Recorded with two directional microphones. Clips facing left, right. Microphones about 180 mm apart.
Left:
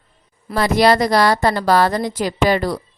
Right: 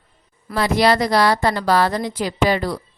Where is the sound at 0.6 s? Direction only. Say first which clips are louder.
Left 2 dB; 45° left (ahead or behind).